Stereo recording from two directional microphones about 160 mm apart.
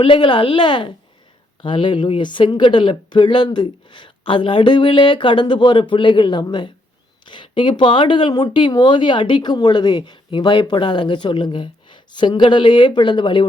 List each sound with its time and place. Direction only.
0.0 s speech: 30° left (ahead or behind)